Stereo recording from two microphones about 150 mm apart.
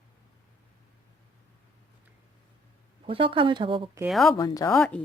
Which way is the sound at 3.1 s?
35° right (ahead or behind).